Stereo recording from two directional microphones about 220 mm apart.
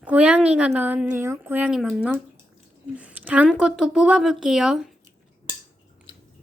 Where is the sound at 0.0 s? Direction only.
5° right (ahead or behind).